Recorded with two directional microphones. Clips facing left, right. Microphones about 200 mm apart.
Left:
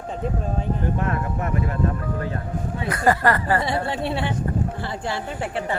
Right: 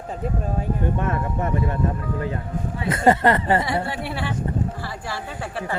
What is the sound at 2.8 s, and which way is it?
Speech, 25° right (ahead or behind).